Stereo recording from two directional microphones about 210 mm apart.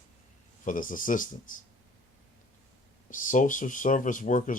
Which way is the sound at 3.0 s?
40° left (ahead or behind).